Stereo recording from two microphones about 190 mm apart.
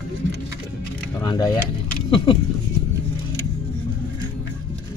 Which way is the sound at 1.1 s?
20° left (ahead or behind).